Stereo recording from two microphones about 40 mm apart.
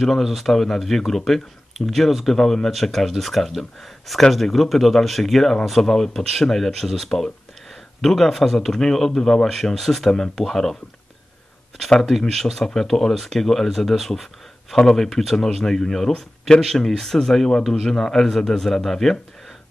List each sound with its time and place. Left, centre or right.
0.0 s a man's voice: centre
12.0 s a man's voice: centre